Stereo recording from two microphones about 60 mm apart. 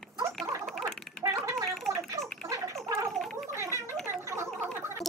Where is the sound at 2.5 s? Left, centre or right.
Right.